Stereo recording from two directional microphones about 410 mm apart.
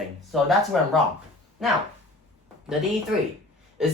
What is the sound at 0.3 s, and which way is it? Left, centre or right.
Speech, centre.